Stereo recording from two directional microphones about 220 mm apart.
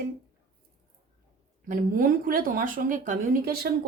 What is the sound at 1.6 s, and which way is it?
Speech, 40° right (ahead or behind).